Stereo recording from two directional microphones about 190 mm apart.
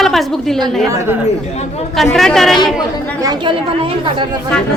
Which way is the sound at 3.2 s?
20° right (ahead or behind).